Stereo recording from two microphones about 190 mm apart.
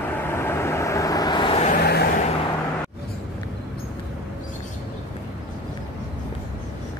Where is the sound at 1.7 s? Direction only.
55° left (ahead or behind).